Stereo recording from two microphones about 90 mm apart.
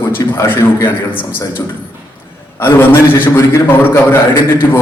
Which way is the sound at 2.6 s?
25° left (ahead or behind).